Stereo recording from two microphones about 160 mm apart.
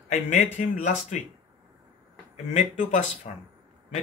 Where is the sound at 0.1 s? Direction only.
45° left (ahead or behind).